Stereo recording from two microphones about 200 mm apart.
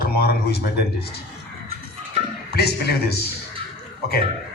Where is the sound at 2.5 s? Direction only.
55° left (ahead or behind).